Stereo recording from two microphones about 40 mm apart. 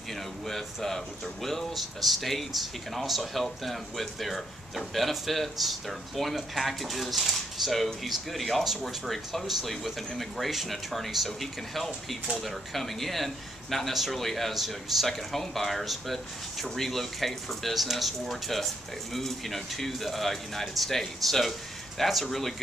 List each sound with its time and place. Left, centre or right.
0.1 s speech: centre